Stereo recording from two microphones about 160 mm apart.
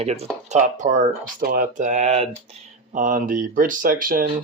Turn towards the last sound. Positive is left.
turn(degrees=-60)  # may be behind; listen again after turning